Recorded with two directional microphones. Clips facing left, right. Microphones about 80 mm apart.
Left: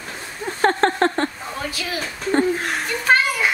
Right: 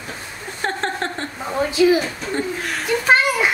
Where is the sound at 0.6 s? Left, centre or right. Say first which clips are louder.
Left 6 dB; left.